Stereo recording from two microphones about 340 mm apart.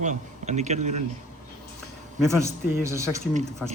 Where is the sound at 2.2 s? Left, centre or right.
Centre.